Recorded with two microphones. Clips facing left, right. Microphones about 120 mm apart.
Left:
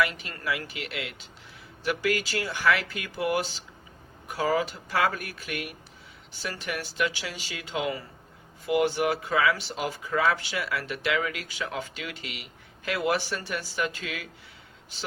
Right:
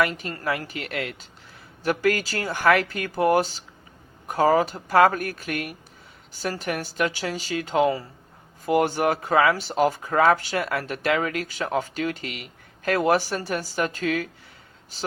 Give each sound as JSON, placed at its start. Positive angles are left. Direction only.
{"t": 0.0, "sound": "speech", "side_deg": -40}